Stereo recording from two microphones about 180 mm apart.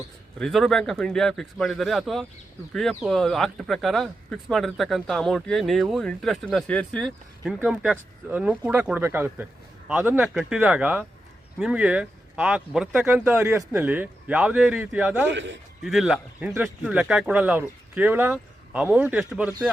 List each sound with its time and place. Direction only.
0.3 s speech: centre (ahead or behind)
15.3 s a man's voice: 85° right
15.8 s speech: centre (ahead or behind)